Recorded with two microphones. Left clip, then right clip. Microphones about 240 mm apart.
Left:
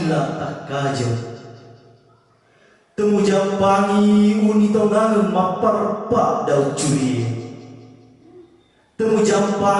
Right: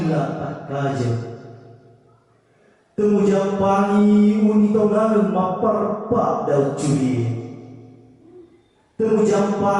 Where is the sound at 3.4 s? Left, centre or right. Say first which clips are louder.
Left 2 dB; centre.